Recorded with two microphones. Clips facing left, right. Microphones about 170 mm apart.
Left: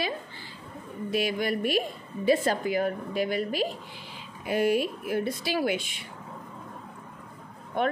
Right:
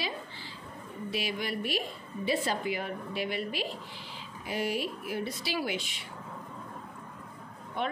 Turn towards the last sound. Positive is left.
turn(degrees=50)  # may be behind; listen again after turning